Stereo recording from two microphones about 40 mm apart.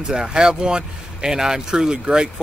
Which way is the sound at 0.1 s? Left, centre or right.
Centre.